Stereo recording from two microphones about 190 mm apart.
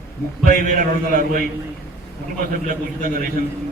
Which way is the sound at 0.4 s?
50° right (ahead or behind).